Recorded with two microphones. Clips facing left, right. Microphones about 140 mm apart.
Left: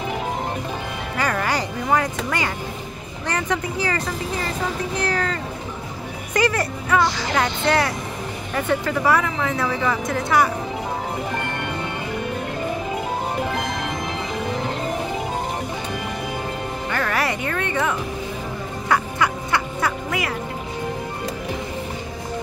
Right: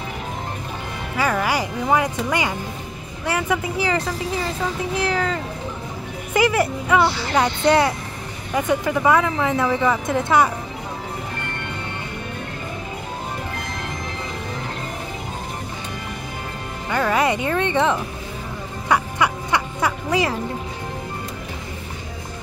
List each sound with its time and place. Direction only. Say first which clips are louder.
1.1 s speech: right 2 dB; 5° right (ahead or behind)
7.3 s a woman's voice: right 4 dB; 20° right (ahead or behind)
16.9 s a woman's voice: right 5 dB; 20° right (ahead or behind)
18.9 s music: right 1 dB; 15° right (ahead or behind)